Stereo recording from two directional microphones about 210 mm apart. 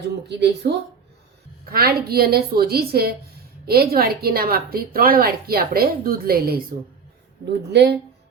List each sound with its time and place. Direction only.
0.3 s a woman's voice: 55° right (ahead or behind)
1.7 s a woman's voice: 45° right (ahead or behind)